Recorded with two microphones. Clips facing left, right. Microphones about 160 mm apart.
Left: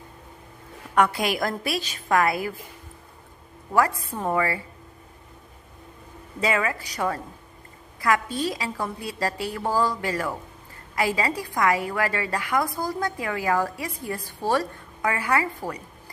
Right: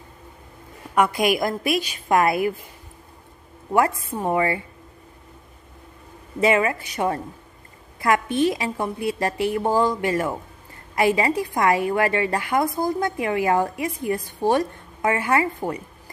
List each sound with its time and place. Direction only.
0.9 s a woman's voice: 15° right (ahead or behind)
3.7 s a woman's voice: 25° right (ahead or behind)
6.4 s a woman's voice: 25° right (ahead or behind)